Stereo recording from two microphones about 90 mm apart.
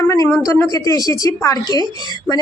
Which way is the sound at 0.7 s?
40° left (ahead or behind).